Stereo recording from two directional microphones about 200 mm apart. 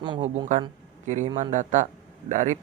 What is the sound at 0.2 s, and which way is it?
A woman's voice, 40° right (ahead or behind).